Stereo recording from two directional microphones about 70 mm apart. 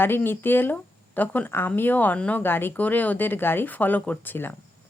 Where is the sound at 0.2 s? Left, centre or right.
Left.